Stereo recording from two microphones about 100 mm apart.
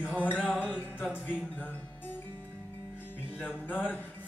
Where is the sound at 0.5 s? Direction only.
15° right (ahead or behind).